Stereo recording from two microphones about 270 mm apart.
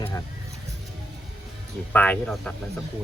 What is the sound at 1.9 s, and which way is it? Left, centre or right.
Speech, centre.